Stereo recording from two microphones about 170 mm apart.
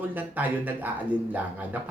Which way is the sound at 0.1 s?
10° right (ahead or behind).